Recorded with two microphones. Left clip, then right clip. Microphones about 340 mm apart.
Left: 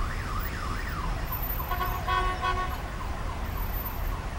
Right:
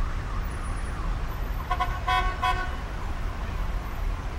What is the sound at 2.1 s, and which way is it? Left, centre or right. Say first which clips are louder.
Toot: right 3 dB; centre.